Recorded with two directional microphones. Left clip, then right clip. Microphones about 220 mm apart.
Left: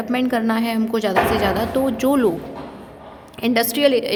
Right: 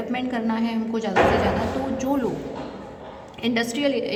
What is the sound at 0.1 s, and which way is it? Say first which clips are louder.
A woman's voice: left 8 dB; 50° left (ahead or behind).